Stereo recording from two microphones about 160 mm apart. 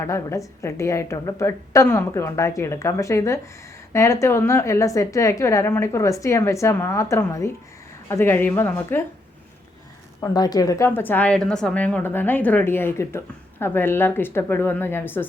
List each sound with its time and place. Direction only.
0.0 s a woman's voice: 15° left (ahead or behind)
10.2 s a woman's voice: 25° left (ahead or behind)